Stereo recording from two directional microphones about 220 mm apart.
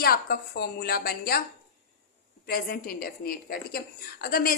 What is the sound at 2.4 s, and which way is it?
A woman's voice, 45° left (ahead or behind).